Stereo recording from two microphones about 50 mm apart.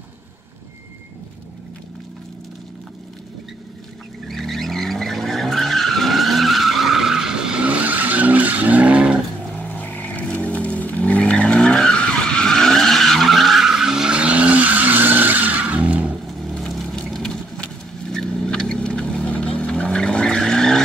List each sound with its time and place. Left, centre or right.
4.3 s vehicle: centre
7.6 s vehicle: right
9.6 s vehicle: left
11.4 s vehicle: centre
14.1 s vehicle: right
16.3 s vehicle: centre